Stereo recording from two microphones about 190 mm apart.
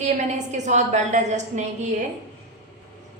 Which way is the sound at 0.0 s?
40° right (ahead or behind).